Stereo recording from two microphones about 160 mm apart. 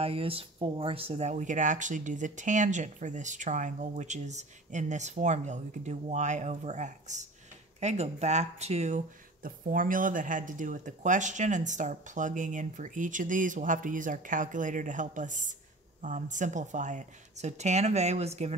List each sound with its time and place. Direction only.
0.0 s speech: 35° right (ahead or behind)